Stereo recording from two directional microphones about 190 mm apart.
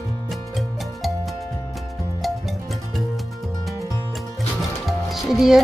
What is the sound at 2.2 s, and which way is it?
Music, centre (ahead or behind).